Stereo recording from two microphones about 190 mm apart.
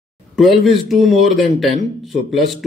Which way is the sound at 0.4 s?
Centre (ahead or behind).